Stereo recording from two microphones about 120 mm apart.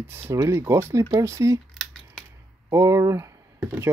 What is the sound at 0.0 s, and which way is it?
Speech, 20° right (ahead or behind).